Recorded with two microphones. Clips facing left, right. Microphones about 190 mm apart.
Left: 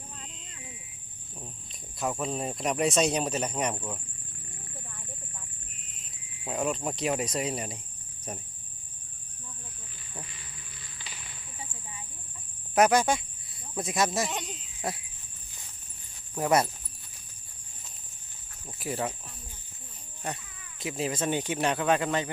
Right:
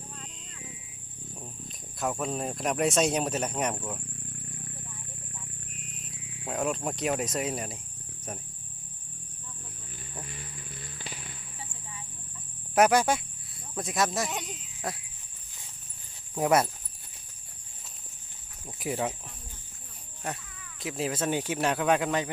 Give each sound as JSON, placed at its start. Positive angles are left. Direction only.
{"t": 2.0, "sound": "speech", "side_deg": 0}
{"t": 6.4, "sound": "speech", "side_deg": 0}
{"t": 10.2, "sound": "insect", "side_deg": -50}
{"t": 12.7, "sound": "speech", "side_deg": -10}
{"t": 16.3, "sound": "speech", "side_deg": -10}
{"t": 20.2, "sound": "speech", "side_deg": 0}